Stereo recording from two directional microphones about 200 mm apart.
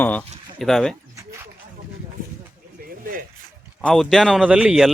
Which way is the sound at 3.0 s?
45° right (ahead or behind).